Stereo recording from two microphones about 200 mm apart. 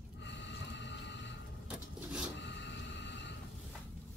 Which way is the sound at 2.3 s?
60° left (ahead or behind).